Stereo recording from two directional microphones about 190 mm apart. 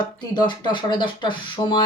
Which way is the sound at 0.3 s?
25° left (ahead or behind).